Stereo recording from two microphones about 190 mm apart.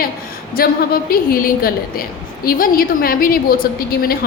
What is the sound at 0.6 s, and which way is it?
A woman's voice, 50° left (ahead or behind).